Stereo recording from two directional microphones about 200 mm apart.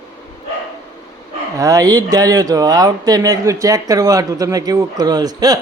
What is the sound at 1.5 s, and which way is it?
Speech, 15° right (ahead or behind).